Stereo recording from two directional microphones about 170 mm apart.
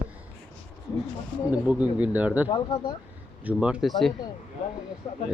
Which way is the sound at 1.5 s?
10° right (ahead or behind).